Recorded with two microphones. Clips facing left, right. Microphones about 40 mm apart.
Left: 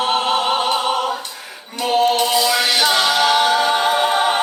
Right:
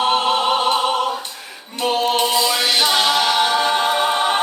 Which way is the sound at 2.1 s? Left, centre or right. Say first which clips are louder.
Left 1 dB; centre.